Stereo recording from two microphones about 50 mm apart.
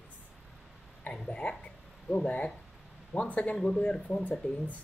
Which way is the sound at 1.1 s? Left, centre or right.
Centre.